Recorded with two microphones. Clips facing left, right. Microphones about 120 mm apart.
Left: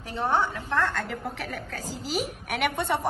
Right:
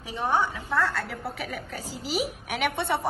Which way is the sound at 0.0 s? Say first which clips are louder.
Even; 10° right (ahead or behind).